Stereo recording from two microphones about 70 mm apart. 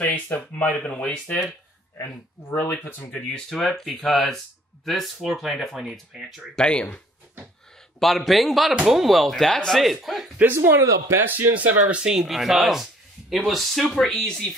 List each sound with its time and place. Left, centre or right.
0.0 s speech: left
2.5 s speech: left
3.1 s speech: centre
6.5 s speech: centre
8.0 s speech: centre
10.5 s speech: right
11.5 s speech: centre